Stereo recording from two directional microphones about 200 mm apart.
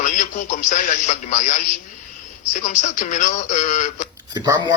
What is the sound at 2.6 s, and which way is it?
A man's voice, 35° left (ahead or behind).